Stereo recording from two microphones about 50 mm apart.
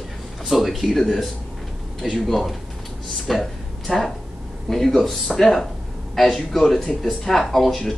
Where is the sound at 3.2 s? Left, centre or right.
Centre.